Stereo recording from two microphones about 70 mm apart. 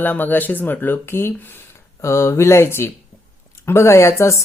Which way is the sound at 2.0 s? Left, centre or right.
Left.